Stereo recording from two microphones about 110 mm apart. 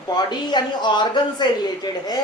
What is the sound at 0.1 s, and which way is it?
Speech, 40° left (ahead or behind).